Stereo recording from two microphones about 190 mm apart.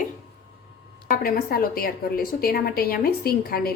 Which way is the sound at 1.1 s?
50° left (ahead or behind).